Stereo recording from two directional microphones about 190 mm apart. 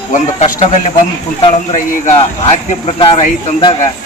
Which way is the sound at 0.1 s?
35° left (ahead or behind).